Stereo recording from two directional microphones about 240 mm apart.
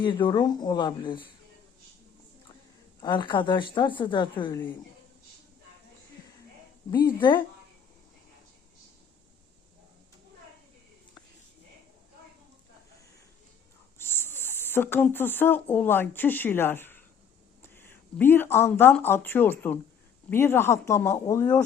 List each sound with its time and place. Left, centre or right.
0.0 s a woman's voice: centre
3.0 s a woman's voice: centre
6.9 s speech: centre
14.0 s speech: centre